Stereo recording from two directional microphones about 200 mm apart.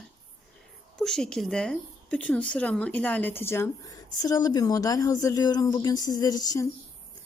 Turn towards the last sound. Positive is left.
turn(degrees=20)  # may be behind; listen again after turning